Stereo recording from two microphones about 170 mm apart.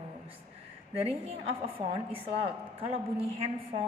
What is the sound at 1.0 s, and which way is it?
A woman's voice, 35° right (ahead or behind).